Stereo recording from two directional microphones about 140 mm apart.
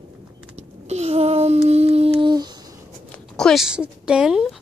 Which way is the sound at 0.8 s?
50° right (ahead or behind).